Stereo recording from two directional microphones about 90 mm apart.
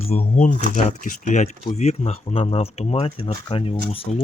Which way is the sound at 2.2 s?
90° left.